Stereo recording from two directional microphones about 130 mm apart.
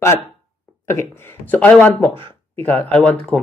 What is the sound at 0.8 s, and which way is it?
Speech, 20° left (ahead or behind).